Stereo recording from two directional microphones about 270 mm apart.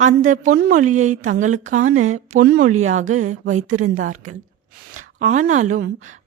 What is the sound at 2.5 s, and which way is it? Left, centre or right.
Speech, right.